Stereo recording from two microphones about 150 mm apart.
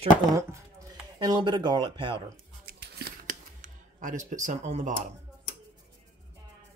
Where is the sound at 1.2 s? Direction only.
30° right (ahead or behind).